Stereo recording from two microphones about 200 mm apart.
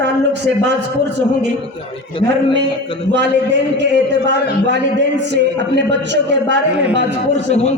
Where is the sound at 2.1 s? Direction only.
25° left (ahead or behind).